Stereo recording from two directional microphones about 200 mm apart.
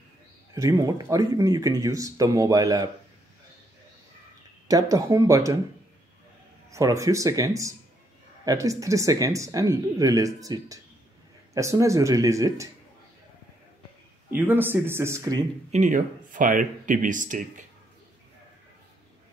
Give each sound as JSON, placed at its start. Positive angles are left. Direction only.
{"t": 0.6, "sound": "speech", "side_deg": -15}
{"t": 4.6, "sound": "speech", "side_deg": -15}
{"t": 6.7, "sound": "speech", "side_deg": -15}
{"t": 14.3, "sound": "speech", "side_deg": -10}
{"t": 15.7, "sound": "speech", "side_deg": -40}